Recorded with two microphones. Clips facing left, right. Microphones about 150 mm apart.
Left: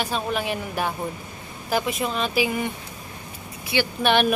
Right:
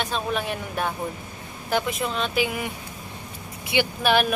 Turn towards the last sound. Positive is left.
turn(degrees=0)  # may be behind; listen again after turning